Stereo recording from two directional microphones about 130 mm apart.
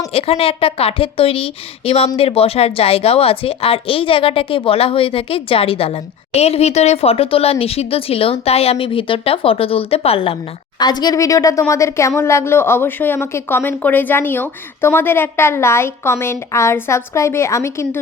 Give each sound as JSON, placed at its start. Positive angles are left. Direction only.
{"t": 0.1, "sound": "a woman's voice", "side_deg": 45}
{"t": 10.8, "sound": "a woman's voice", "side_deg": 30}